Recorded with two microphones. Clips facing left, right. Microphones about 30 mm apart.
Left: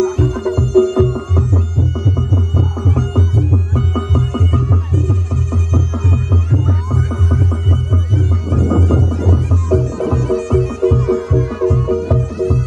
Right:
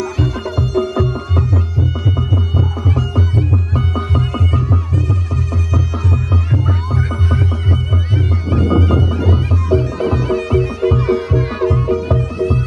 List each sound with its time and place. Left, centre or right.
0.0 s music: right